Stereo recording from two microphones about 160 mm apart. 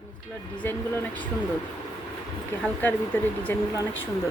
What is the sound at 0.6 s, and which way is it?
Speech, 10° left (ahead or behind).